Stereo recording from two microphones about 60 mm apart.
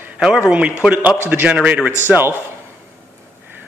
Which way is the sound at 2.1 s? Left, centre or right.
Right.